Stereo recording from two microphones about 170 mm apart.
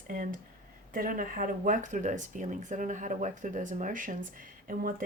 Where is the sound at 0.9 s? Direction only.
55° right (ahead or behind).